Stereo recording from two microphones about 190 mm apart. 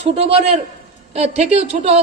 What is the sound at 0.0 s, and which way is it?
Speech, 30° right (ahead or behind).